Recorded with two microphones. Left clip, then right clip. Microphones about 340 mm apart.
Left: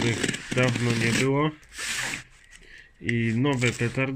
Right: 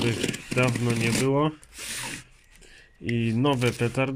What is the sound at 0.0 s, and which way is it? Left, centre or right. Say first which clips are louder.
Speech: left 1 dB; centre.